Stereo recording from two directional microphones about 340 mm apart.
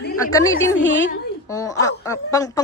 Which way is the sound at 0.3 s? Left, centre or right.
Centre.